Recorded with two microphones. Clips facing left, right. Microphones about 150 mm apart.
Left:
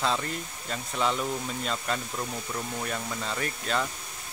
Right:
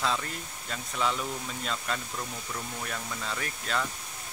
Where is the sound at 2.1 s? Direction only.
15° left (ahead or behind).